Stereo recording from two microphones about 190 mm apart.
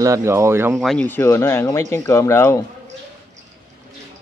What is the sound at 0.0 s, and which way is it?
Speech, 15° right (ahead or behind).